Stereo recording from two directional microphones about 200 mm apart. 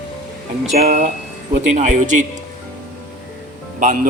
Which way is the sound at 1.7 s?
40° right (ahead or behind).